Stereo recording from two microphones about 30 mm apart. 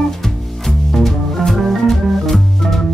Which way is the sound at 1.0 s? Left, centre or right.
Centre.